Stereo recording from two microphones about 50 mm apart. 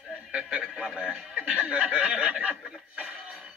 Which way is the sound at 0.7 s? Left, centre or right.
Centre.